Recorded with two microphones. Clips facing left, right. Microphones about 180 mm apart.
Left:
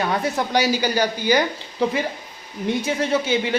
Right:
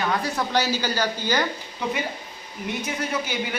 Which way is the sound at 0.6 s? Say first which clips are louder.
Left 5 dB; 15° left (ahead or behind).